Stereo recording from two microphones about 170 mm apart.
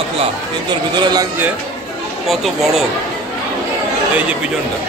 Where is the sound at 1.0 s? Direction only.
25° right (ahead or behind).